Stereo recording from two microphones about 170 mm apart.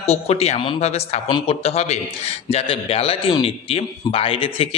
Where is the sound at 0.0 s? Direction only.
40° left (ahead or behind).